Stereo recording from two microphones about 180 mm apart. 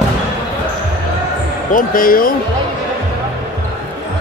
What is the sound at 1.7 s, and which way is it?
Speech, 50° left (ahead or behind).